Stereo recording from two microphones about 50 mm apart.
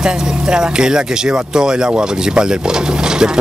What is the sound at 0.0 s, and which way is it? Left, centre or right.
Speech, centre.